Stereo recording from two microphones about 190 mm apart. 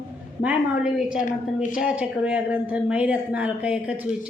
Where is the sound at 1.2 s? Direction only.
45° left (ahead or behind).